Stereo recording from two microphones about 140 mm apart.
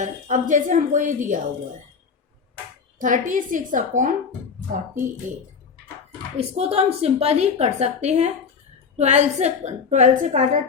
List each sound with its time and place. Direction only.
0.0 s a woman's voice: 65° right (ahead or behind)
3.0 s a woman's voice: 70° right (ahead or behind)
6.3 s a woman's voice: 50° right (ahead or behind)